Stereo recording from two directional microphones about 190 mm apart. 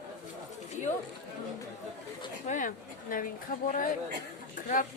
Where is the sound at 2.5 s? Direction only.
45° left (ahead or behind).